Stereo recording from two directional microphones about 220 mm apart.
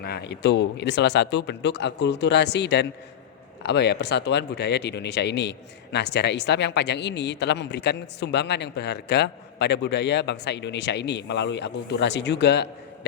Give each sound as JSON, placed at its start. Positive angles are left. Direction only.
{"t": 0.0, "sound": "speech", "side_deg": 50}